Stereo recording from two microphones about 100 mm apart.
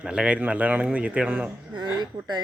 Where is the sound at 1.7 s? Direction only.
45° right (ahead or behind).